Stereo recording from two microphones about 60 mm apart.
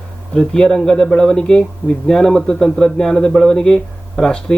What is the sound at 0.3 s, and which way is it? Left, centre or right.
A man's voice, centre.